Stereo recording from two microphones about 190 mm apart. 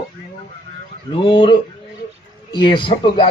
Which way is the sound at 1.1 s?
25° left (ahead or behind).